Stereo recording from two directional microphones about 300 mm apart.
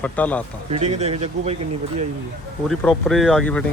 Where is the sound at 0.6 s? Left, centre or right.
Right.